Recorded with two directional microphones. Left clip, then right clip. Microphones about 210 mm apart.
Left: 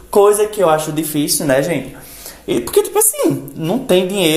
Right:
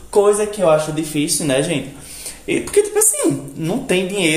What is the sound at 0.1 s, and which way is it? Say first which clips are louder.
A man's voice: left 3 dB; 35° left (ahead or behind).